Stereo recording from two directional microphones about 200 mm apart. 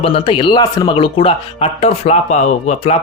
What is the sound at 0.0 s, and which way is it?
Speech, 25° left (ahead or behind).